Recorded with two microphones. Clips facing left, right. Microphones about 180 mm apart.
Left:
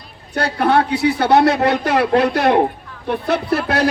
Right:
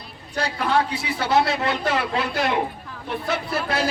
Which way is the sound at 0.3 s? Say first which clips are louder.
Left 6 dB; 65° left (ahead or behind).